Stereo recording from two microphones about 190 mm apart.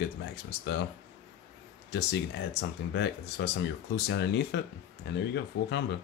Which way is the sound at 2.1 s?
65° left (ahead or behind).